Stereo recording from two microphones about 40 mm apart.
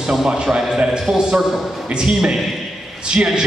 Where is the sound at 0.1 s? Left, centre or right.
Centre; by 3.3 s right.